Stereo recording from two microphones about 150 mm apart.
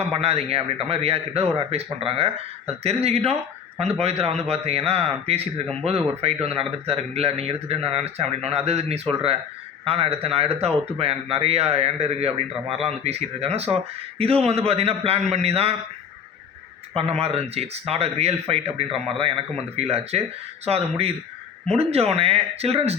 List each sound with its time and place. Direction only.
0.0 s a man's voice: 40° right (ahead or behind)
17.0 s a man's voice: 40° right (ahead or behind)